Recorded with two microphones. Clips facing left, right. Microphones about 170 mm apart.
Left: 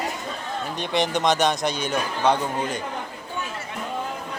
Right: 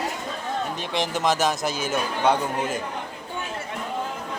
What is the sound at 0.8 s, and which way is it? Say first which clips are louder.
Speech: left 7 dB; centre (ahead or behind).